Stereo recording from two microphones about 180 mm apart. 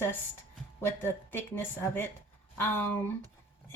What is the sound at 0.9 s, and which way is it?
A woman's voice, 10° left (ahead or behind).